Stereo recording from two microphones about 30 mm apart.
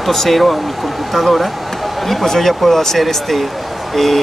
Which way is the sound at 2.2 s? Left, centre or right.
Centre.